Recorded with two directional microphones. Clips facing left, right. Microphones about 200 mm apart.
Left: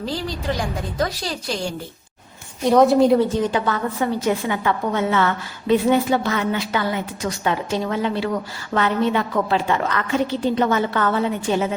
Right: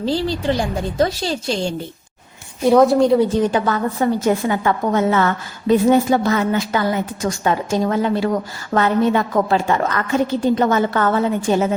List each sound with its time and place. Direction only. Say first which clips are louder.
0.0 s a woman's voice: right 6 dB; 30° right (ahead or behind)
2.6 s a woman's voice: right 2 dB; centre (ahead or behind)
3.5 s a woman's voice: right 3 dB; 40° right (ahead or behind)